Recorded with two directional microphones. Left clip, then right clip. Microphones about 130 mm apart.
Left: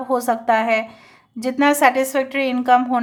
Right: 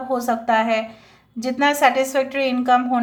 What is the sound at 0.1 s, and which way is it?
A woman's voice, 40° left (ahead or behind).